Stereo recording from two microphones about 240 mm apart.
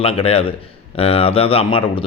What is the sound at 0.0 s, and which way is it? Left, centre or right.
Speech, left.